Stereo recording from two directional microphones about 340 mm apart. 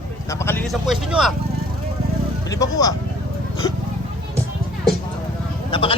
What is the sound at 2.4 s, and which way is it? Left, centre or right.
Speech, centre.